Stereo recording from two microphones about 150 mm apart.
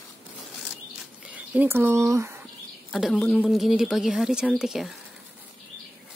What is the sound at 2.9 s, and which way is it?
A woman's voice, centre (ahead or behind).